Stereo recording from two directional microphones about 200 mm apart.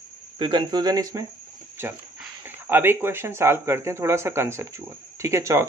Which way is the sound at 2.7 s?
10° right (ahead or behind).